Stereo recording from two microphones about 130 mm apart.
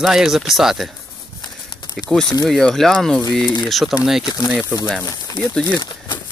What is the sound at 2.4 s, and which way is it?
Speech, centre (ahead or behind).